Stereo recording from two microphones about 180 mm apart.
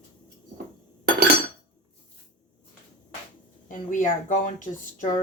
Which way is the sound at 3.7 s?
50° left (ahead or behind).